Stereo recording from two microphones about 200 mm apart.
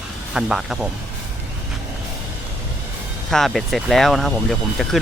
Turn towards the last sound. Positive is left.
turn(degrees=0)  # may be behind; listen again after turning